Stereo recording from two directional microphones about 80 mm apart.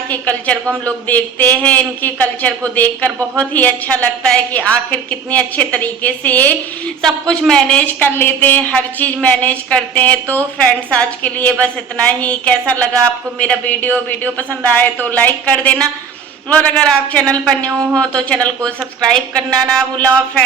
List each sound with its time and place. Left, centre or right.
0.1 s a woman's voice: centre
7.0 s a woman's voice: centre
7.9 s a woman's voice: left